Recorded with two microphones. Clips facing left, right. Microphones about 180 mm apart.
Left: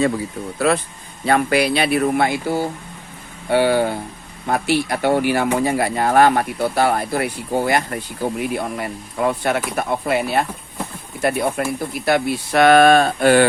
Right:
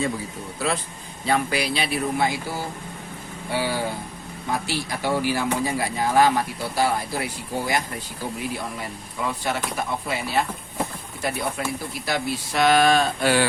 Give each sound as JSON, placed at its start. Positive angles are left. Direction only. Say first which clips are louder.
{"t": 0.6, "sound": "speech", "louder": "left 8 dB", "side_deg": 60}